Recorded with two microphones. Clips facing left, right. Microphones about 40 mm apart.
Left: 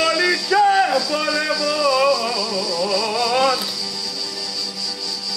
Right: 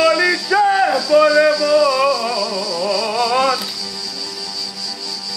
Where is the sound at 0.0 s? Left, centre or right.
Centre.